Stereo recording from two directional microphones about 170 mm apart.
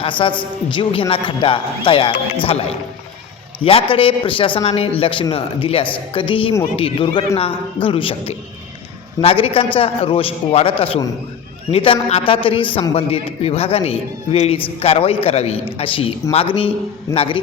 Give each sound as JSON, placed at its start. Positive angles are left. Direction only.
{"t": 0.0, "sound": "a man's voice", "side_deg": 30}